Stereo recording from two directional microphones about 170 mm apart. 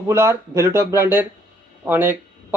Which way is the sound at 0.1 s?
15° right (ahead or behind).